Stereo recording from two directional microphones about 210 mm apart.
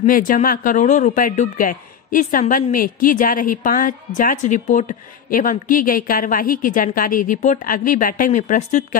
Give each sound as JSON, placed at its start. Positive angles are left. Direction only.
{"t": 0.0, "sound": "speech", "side_deg": 40}